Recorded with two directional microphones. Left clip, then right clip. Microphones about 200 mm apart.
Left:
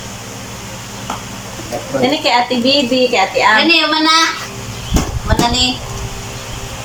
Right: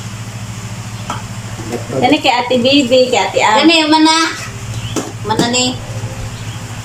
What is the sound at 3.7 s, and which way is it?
Speech, 35° right (ahead or behind).